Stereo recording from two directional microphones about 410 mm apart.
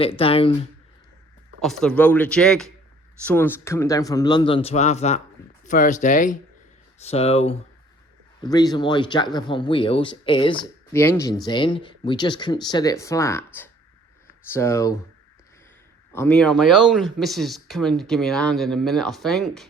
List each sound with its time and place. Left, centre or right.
0.0 s speech: centre
1.6 s speech: centre
16.1 s speech: centre